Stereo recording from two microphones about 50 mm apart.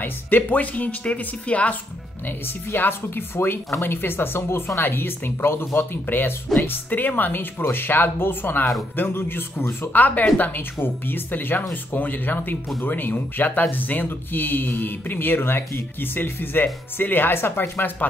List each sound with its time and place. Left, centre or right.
0.0 s speech: left
2.2 s speech: left
9.9 s speech: left